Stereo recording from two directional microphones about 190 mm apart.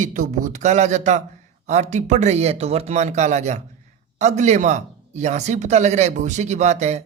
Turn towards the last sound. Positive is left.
turn(degrees=-35)  # may be behind; listen again after turning